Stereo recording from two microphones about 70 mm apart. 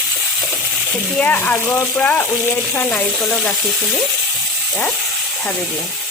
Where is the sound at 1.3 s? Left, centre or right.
Left.